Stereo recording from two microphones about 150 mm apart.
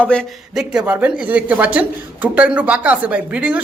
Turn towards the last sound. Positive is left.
turn(degrees=-10)  # may be behind; listen again after turning